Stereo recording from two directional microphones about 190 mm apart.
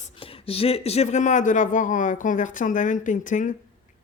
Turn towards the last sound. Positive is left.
turn(degrees=40)  # may be behind; listen again after turning